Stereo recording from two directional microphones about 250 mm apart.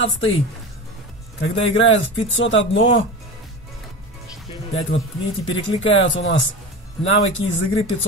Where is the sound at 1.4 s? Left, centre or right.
Left.